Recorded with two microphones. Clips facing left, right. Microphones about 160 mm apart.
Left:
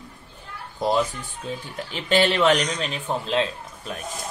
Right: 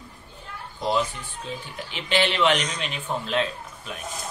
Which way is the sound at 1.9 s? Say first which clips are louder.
Left 4 dB; 40° left (ahead or behind).